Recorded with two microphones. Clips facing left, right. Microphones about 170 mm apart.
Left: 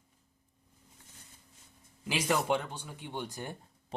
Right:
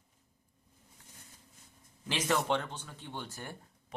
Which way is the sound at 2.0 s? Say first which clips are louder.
Left 1 dB; 10° left (ahead or behind).